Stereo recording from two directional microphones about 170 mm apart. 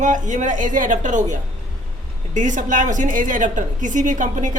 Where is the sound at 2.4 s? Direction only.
45° right (ahead or behind).